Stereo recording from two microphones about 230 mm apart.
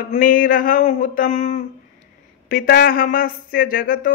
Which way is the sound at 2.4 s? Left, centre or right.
Left.